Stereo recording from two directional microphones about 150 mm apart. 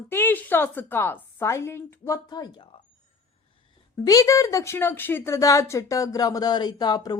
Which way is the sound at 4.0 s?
25° left (ahead or behind).